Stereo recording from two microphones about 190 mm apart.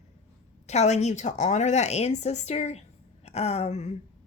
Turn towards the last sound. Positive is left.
turn(degrees=35)  # may be behind; listen again after turning